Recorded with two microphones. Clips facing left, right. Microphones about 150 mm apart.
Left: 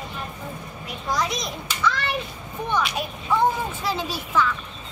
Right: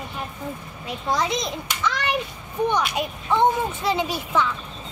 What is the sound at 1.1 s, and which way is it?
A child's voice, 25° right (ahead or behind).